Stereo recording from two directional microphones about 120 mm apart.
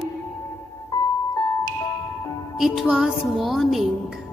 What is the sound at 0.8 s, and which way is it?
Music, 35° left (ahead or behind).